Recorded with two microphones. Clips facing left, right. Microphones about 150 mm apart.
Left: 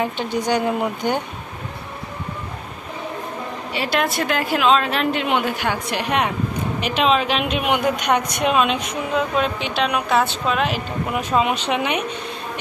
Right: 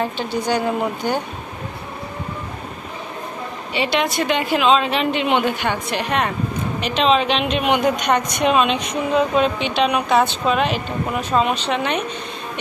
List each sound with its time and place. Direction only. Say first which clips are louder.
0.0 s a woman's voice: even; 15° left (ahead or behind)
3.7 s speech: right 2 dB; centre (ahead or behind)